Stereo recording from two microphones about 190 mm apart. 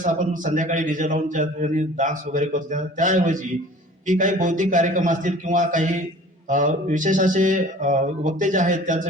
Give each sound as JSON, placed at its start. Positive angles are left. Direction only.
{"t": 0.0, "sound": "a man's voice", "side_deg": -40}